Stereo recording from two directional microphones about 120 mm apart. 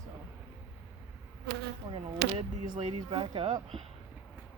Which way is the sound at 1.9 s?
50° right (ahead or behind).